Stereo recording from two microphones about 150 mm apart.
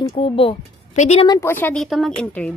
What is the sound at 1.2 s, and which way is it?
Speech, 15° left (ahead or behind).